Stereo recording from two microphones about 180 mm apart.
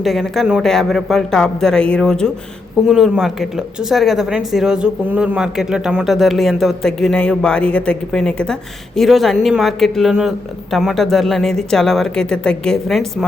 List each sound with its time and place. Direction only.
0.0 s speech: centre (ahead or behind)